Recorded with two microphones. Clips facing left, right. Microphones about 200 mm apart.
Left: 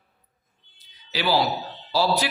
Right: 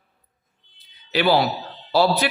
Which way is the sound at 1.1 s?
60° right (ahead or behind).